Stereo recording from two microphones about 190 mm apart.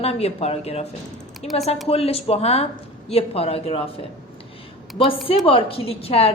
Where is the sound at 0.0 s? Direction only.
30° left (ahead or behind).